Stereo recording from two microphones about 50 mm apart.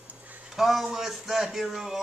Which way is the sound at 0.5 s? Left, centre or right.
Centre.